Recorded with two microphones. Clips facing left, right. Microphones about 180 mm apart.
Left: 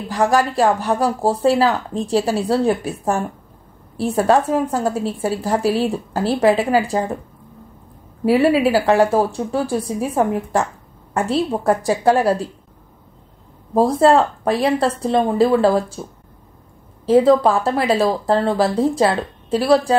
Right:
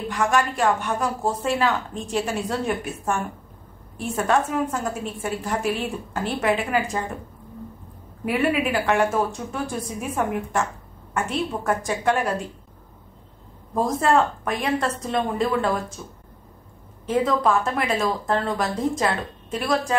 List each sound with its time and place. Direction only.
0.1 s a woman's voice: 35° left (ahead or behind)
8.3 s a woman's voice: 35° left (ahead or behind)
13.7 s a woman's voice: 35° left (ahead or behind)